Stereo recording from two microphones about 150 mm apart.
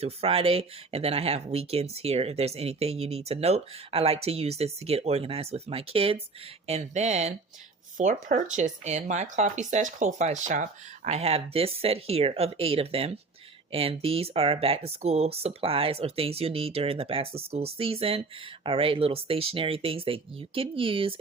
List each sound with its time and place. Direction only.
0.0 s speech: 40° right (ahead or behind)
7.9 s speech: 60° right (ahead or behind); by 21.2 s 35° right (ahead or behind)